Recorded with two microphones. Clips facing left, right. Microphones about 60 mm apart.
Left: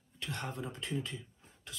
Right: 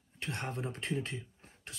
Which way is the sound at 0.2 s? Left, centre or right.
Right.